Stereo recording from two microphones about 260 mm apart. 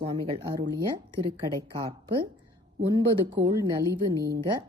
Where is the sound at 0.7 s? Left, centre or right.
Centre.